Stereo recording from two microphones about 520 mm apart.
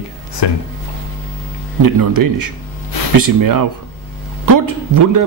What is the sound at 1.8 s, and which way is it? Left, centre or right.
Speech, right.